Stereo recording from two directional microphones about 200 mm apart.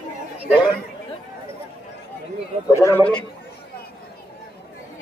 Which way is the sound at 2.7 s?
10° left (ahead or behind).